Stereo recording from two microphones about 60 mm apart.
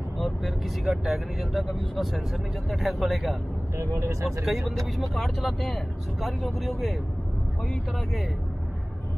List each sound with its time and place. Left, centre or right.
0.2 s speech: centre
3.7 s speech: right
4.6 s speech: centre